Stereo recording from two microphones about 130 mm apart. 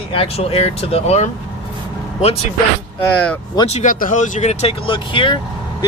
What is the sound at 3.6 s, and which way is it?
Speech, 55° left (ahead or behind).